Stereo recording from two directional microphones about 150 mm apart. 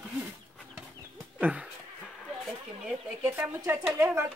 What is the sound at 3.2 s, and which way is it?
Speech, 15° right (ahead or behind).